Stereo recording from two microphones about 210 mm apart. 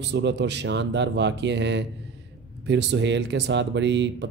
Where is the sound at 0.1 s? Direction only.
55° right (ahead or behind).